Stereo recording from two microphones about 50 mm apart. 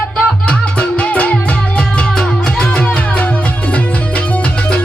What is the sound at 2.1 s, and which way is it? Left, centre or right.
Music, centre.